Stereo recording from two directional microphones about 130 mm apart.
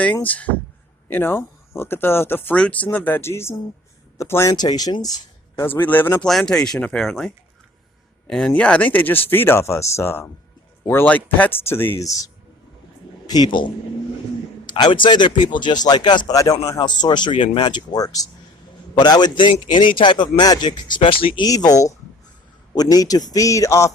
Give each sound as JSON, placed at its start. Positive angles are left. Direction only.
{"t": 0.0, "sound": "a man's voice", "side_deg": 10}
{"t": 5.6, "sound": "speech", "side_deg": 15}
{"t": 6.2, "sound": "a man's voice", "side_deg": 5}
{"t": 21.4, "sound": "a man's voice", "side_deg": 30}